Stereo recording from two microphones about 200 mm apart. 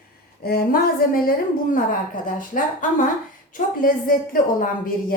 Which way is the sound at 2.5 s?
40° left (ahead or behind).